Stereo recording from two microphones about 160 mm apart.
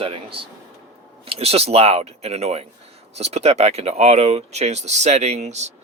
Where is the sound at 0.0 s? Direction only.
35° right (ahead or behind).